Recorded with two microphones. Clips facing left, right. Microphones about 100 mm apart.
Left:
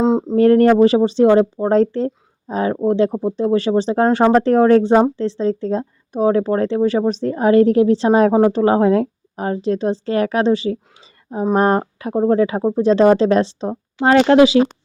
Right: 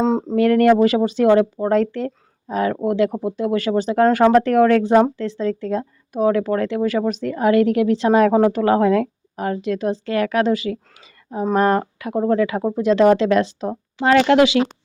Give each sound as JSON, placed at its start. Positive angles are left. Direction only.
{"t": 0.0, "sound": "speech", "side_deg": 10}
{"t": 0.3, "sound": "speech", "side_deg": 35}